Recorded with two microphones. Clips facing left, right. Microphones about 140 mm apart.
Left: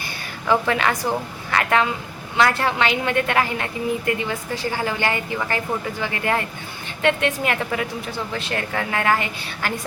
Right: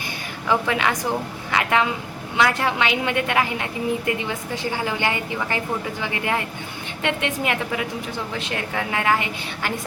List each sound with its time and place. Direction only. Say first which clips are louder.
0.4 s a woman's voice: left 2 dB; 15° right (ahead or behind)